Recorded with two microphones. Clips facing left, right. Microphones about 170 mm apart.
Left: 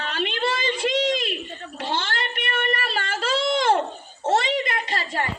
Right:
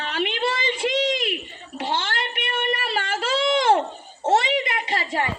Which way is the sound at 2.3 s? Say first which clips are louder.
Even; 20° right (ahead or behind).